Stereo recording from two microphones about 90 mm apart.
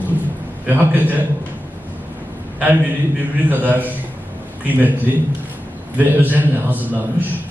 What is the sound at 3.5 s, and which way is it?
Speech, 20° right (ahead or behind).